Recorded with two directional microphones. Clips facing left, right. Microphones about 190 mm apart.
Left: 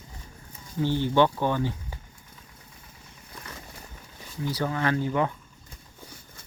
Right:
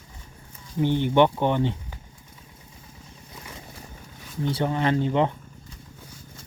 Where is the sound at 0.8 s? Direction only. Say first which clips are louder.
Right 3 dB; 20° right (ahead or behind).